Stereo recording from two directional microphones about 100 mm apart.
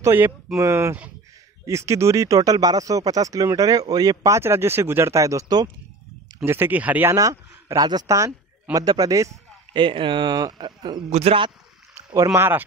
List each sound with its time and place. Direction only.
0.0 s speech: 20° right (ahead or behind); by 5.7 s 40° right (ahead or behind)
6.4 s speech: 20° right (ahead or behind)
7.2 s speech: 35° right (ahead or behind)
9.8 s speech: 55° right (ahead or behind)
11.1 s a man's voice: 90° right
12.4 s speech: 20° right (ahead or behind)